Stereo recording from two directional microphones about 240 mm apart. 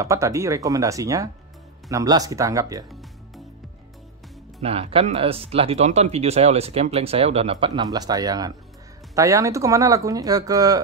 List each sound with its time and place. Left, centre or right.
0.0 s speech: centre
4.6 s speech: right